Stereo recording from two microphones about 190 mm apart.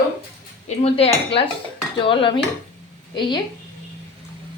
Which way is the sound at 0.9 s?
30° left (ahead or behind).